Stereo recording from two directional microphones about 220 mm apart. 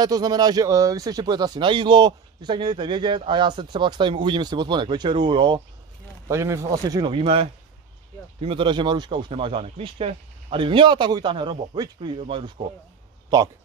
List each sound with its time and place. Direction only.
0.0 s speech: 20° right (ahead or behind)